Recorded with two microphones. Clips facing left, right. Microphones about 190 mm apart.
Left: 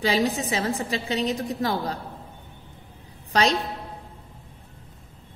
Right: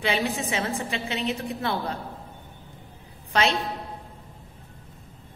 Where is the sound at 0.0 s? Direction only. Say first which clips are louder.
Left 3 dB; 35° left (ahead or behind).